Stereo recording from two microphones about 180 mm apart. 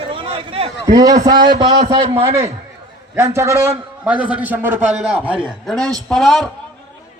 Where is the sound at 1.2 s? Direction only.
25° right (ahead or behind).